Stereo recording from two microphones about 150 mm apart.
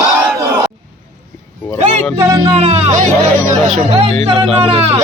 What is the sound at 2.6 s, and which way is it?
Music, 45° right (ahead or behind).